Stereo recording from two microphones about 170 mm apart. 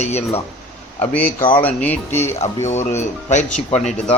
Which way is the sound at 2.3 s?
40° left (ahead or behind).